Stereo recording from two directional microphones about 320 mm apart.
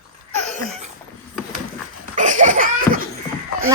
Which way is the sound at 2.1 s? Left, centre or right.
Right.